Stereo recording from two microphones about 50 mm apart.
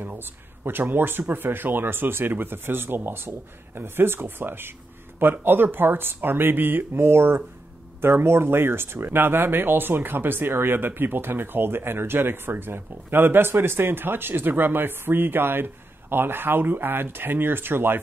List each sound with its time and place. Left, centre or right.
0.0 s speech: right